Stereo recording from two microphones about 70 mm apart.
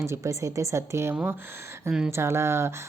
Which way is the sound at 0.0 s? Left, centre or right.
Right.